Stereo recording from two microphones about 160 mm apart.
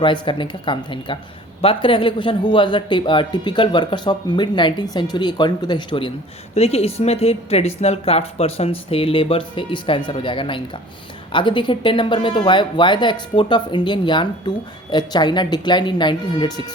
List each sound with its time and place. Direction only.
0.0 s speech: 30° left (ahead or behind)
6.5 s speech: 40° left (ahead or behind)